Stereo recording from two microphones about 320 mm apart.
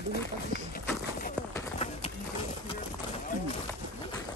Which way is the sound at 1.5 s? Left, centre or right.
Centre.